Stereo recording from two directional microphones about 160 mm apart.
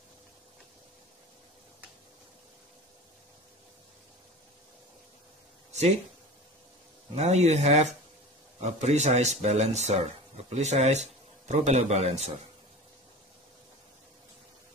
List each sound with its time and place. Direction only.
5.7 s speech: 45° right (ahead or behind)
7.2 s speech: 45° right (ahead or behind)